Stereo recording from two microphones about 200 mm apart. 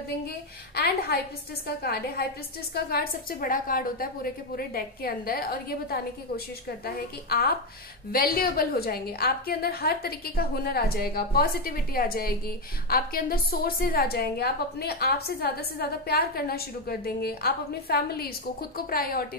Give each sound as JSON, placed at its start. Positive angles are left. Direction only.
{"t": 0.7, "sound": "a woman's voice", "side_deg": 50}